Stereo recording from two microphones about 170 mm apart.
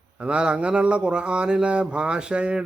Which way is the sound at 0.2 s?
5° right (ahead or behind).